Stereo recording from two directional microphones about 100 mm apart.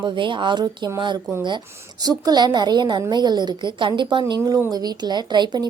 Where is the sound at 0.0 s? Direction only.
55° right (ahead or behind).